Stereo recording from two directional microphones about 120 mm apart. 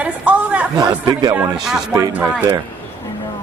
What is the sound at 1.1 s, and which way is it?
Speech, 30° right (ahead or behind).